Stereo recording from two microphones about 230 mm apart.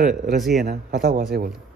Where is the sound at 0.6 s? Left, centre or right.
Right.